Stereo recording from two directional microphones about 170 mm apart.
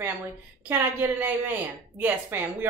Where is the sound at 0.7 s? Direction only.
10° right (ahead or behind).